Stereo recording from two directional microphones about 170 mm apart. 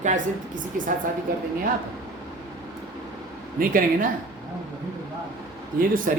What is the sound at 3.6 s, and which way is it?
Speech, 55° right (ahead or behind).